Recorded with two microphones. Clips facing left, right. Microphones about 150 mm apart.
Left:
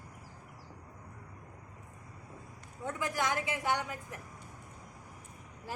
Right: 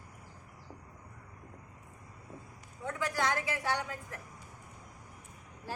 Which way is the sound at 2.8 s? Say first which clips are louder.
Right 1 dB; 20° left (ahead or behind).